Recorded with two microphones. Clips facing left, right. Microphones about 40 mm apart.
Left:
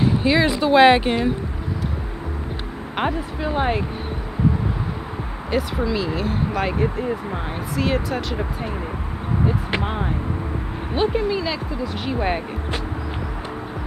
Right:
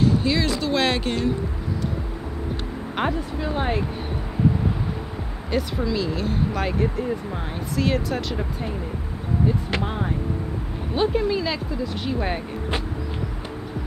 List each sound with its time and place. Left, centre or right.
0.0 s speech: left
2.5 s speech: centre
5.5 s speech: centre
9.5 s speech: centre